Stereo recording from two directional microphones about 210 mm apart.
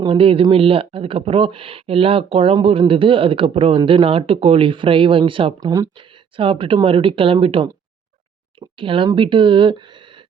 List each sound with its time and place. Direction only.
0.0 s speech: 25° right (ahead or behind)